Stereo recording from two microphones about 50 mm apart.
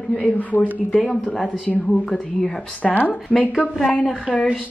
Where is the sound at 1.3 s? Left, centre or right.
Centre.